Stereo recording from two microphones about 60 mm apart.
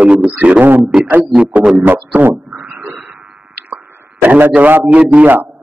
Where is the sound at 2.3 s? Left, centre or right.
Right.